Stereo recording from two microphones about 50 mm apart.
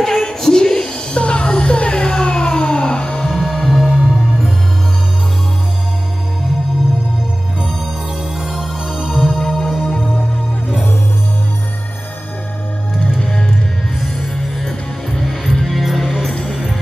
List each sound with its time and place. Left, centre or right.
0.0 s a sound: centre
3.5 s music: centre
8.4 s music: centre
13.2 s music: centre